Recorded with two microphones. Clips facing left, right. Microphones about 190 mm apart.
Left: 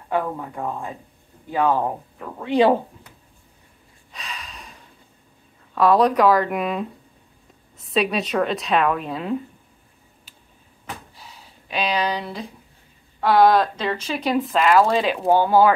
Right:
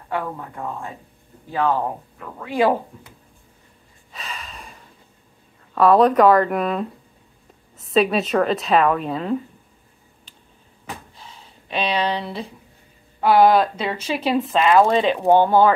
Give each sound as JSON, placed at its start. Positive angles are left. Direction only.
{"t": 0.1, "sound": "speech", "side_deg": 15}
{"t": 2.4, "sound": "speech", "side_deg": 25}
{"t": 4.1, "sound": "gasp", "side_deg": 0}
{"t": 5.8, "sound": "speech", "side_deg": 0}
{"t": 11.7, "sound": "speech", "side_deg": 5}